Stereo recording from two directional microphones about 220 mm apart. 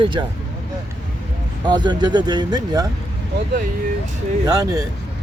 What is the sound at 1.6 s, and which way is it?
Speech, 20° right (ahead or behind).